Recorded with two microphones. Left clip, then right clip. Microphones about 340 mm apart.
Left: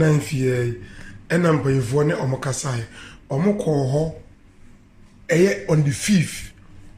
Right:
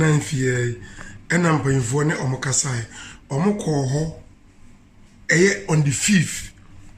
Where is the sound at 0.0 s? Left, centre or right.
Centre.